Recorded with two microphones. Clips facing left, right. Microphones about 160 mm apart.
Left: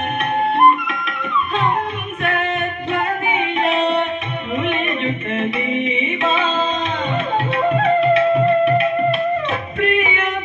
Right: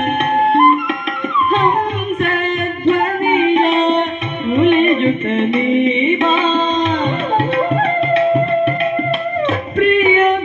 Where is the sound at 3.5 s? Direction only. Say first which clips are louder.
Right 5 dB; 35° right (ahead or behind).